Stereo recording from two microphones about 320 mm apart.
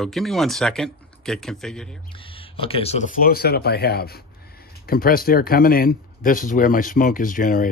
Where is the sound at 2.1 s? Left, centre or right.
Centre.